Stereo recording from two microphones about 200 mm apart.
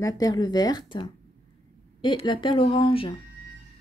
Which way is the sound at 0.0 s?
20° left (ahead or behind).